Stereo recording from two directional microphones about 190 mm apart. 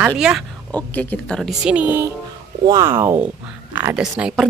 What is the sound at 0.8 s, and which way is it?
Speech, 5° left (ahead or behind).